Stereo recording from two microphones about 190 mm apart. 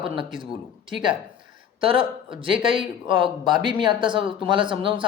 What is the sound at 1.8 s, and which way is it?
Speech, 30° right (ahead or behind).